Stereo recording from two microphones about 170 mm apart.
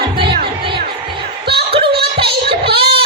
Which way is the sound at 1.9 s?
70° right (ahead or behind).